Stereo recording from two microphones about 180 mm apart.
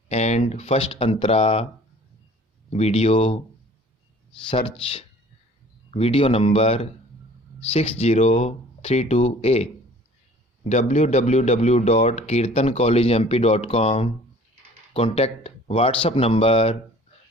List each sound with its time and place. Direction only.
0.1 s speech: 40° left (ahead or behind)
2.7 s speech: 35° left (ahead or behind)
4.4 s speech: 30° left (ahead or behind)